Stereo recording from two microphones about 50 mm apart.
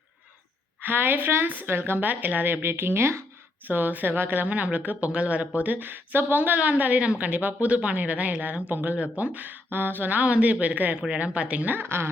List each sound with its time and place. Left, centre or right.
0.8 s speech: right
3.7 s a woman's voice: right
5.5 s a woman's voice: right
7.7 s a woman's voice: right
10.9 s speech: centre
11.3 s a woman's voice: right